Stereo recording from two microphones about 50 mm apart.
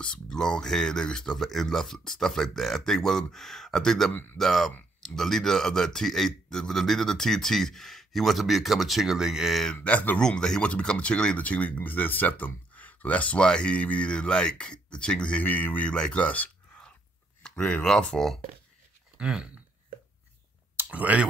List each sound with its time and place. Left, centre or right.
0.0 s speech: centre
4.1 s speech: left
4.4 s a man's voice: centre
9.8 s speech: left
10.1 s speech: centre
15.4 s speech: left
15.8 s speech: left
17.4 s a sound: centre
17.8 s speech: centre
19.1 s speech: centre
20.9 s speech: right